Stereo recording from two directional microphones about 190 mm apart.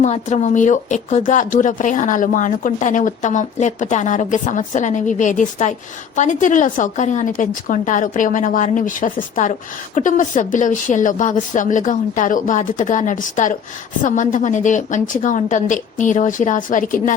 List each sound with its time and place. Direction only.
0.0 s a woman's voice: 35° left (ahead or behind)